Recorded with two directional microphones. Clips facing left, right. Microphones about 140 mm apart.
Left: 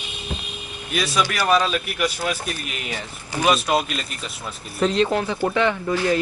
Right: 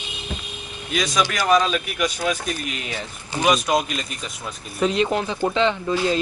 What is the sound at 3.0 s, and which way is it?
Speech, 15° right (ahead or behind).